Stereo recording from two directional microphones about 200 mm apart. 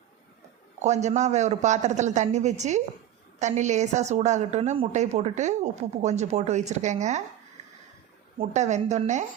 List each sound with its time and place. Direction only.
0.8 s a woman's voice: 35° right (ahead or behind)
8.4 s a woman's voice: 35° right (ahead or behind)